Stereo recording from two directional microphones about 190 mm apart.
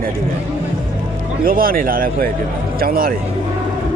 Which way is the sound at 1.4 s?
50° right (ahead or behind).